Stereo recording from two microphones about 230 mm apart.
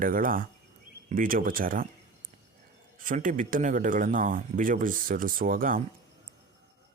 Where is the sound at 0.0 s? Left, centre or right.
Right.